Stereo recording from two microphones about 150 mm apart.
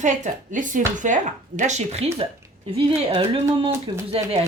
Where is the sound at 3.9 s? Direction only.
30° right (ahead or behind).